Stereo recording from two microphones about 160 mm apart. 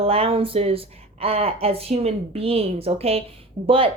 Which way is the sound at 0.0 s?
35° right (ahead or behind).